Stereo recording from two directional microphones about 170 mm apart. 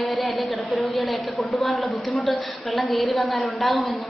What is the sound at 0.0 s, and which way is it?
A woman's voice, centre (ahead or behind).